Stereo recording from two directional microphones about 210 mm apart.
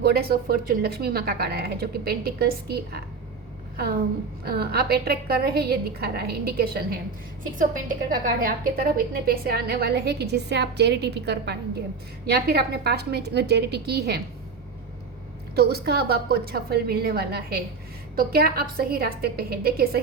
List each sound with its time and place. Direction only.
0.0 s a woman's voice: 45° right (ahead or behind)
4.4 s a woman's voice: 50° right (ahead or behind)
15.5 s a woman's voice: 50° right (ahead or behind)